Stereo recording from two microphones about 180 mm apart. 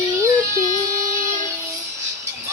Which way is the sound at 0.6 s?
45° right (ahead or behind).